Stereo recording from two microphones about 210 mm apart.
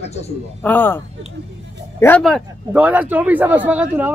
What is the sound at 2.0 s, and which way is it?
A man's voice, 5° left (ahead or behind).